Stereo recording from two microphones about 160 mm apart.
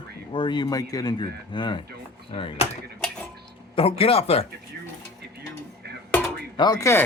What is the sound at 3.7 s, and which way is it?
Speech, 35° left (ahead or behind).